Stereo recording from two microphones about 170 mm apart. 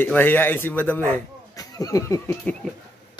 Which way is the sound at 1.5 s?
20° left (ahead or behind).